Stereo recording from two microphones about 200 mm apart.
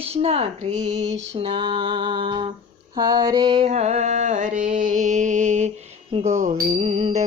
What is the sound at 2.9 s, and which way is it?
Music, 20° right (ahead or behind).